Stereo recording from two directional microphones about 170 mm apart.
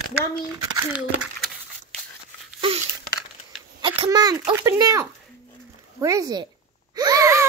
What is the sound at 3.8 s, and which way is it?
Speech, 25° right (ahead or behind).